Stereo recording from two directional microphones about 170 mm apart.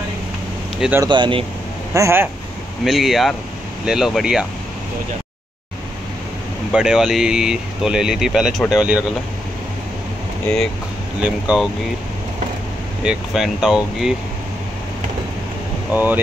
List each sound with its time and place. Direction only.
0.7 s speech: 10° right (ahead or behind)
1.0 s speech: 30° right (ahead or behind)
2.0 s speech: 15° right (ahead or behind)
2.8 s speech: centre (ahead or behind)
6.7 s speech: 5° right (ahead or behind)
11.1 s speech: 5° right (ahead or behind)
13.0 s speech: 5° right (ahead or behind)
15.9 s speech: 10° right (ahead or behind)